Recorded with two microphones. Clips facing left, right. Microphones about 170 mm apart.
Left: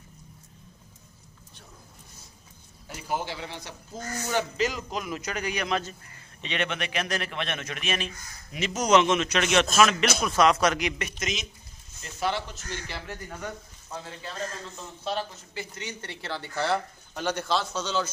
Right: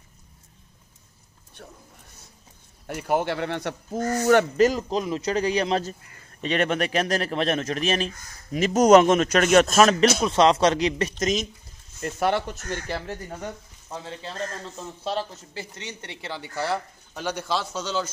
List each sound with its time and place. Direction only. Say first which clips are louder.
2.9 s speech: right 7 dB; 60° right (ahead or behind)
4.6 s a man's voice: right 8 dB; 35° right (ahead or behind)
10.2 s a man's voice: right 1 dB; 25° right (ahead or behind)
12.0 s speech: right 6 dB; 55° right (ahead or behind)
13.1 s speech: right 3 dB; 30° right (ahead or behind)
15.0 s speech: right 2 dB; 35° right (ahead or behind); by 18.0 s 5° right (ahead or behind)